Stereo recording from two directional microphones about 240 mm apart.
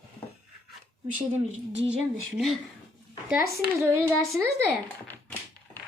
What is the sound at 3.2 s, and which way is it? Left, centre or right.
Speech, centre.